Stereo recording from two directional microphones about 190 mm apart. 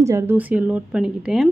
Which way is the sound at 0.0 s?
15° right (ahead or behind).